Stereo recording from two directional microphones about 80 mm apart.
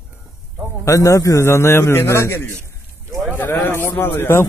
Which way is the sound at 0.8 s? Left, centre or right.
Left.